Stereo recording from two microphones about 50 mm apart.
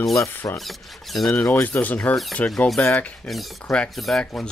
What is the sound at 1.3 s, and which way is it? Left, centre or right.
Speech, left.